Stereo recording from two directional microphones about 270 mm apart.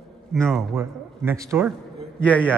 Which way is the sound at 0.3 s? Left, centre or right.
Centre.